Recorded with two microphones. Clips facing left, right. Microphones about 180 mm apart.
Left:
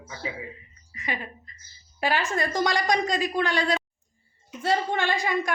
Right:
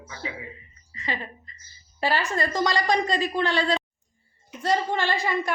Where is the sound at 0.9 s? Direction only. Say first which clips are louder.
Right 1 dB; 15° left (ahead or behind).